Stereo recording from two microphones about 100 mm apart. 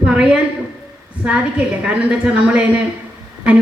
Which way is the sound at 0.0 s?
10° right (ahead or behind).